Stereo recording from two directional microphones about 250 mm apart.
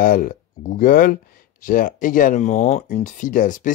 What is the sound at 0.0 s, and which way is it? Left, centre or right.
Speech, left.